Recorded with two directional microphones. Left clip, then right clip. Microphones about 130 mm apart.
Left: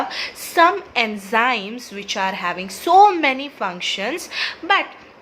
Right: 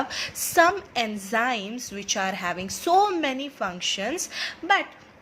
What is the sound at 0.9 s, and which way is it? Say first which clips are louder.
A woman's voice: left 7 dB; 25° right (ahead or behind).